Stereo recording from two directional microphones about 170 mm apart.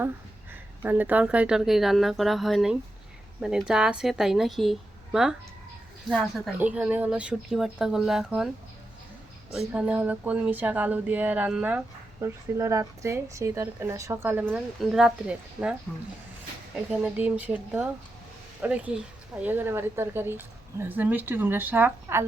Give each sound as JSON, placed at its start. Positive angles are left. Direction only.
{"t": 0.5, "sound": "a woman's voice", "side_deg": -10}
{"t": 6.6, "sound": "a woman's voice", "side_deg": -10}
{"t": 9.5, "sound": "speech", "side_deg": -5}
{"t": 16.9, "sound": "speech", "side_deg": -10}